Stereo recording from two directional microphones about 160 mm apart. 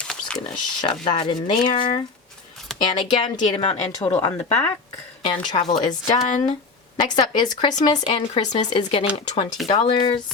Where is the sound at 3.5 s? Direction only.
45° left (ahead or behind).